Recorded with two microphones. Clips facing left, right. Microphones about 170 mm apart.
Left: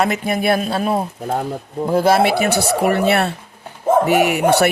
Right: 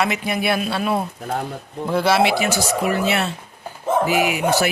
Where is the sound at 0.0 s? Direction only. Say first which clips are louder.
Left 4 dB; 45° left (ahead or behind).